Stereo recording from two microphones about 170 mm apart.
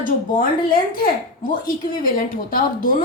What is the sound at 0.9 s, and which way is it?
A woman's voice, 55° left (ahead or behind).